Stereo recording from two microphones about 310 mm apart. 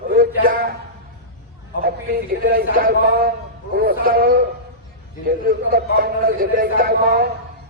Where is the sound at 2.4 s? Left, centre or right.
Right.